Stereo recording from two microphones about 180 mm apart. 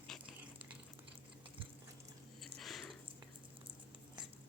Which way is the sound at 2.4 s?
Centre (ahead or behind).